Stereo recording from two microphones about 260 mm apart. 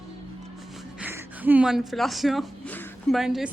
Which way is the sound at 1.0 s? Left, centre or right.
Centre.